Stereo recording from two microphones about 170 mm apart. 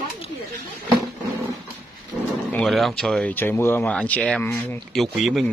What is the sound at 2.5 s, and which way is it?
Speech, 5° left (ahead or behind).